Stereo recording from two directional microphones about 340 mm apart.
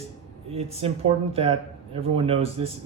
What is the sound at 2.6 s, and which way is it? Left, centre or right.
Speech, centre.